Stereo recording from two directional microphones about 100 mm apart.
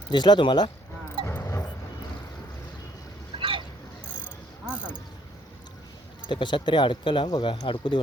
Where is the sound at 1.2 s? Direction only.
25° left (ahead or behind).